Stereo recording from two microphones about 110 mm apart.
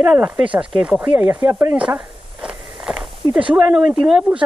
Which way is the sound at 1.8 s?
10° right (ahead or behind).